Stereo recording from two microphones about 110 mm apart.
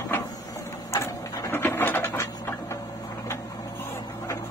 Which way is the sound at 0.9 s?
25° left (ahead or behind).